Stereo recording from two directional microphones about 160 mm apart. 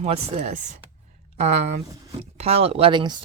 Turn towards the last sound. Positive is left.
turn(degrees=-30)  # may be behind; listen again after turning